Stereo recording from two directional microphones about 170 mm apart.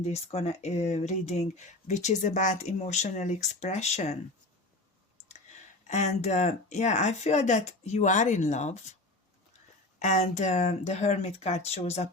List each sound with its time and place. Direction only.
0.0 s speech: 35° left (ahead or behind)
10.0 s speech: 40° left (ahead or behind)